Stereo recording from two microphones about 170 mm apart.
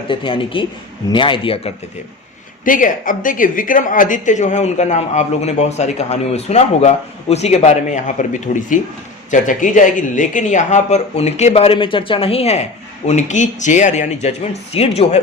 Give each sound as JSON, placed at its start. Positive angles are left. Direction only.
{"t": 0.1, "sound": "speech", "side_deg": 30}
{"t": 2.6, "sound": "a woman's voice", "side_deg": 50}